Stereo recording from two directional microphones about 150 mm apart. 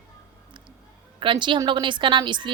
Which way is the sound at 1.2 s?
30° right (ahead or behind).